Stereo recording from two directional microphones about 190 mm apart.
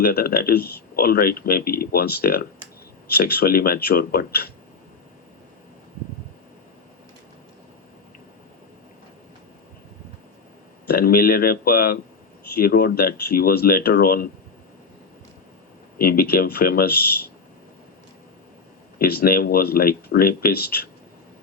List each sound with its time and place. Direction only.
0.0 s speech: 50° left (ahead or behind)
10.8 s speech: 55° left (ahead or behind)
16.0 s speech: 50° left (ahead or behind)
18.9 s speech: 50° left (ahead or behind)